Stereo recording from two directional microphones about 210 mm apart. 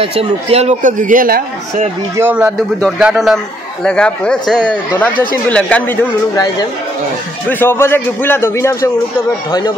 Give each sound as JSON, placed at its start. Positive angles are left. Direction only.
{"t": 0.0, "sound": "a man's voice", "side_deg": -25}
{"t": 2.1, "sound": "a man's voice", "side_deg": -10}
{"t": 7.4, "sound": "speech", "side_deg": 10}